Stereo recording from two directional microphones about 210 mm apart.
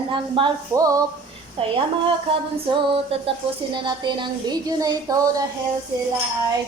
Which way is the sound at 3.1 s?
25° right (ahead or behind).